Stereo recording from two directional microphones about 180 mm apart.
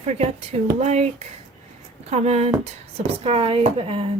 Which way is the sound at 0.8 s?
35° right (ahead or behind).